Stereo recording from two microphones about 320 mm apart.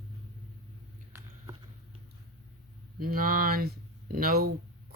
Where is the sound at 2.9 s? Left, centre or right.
Right.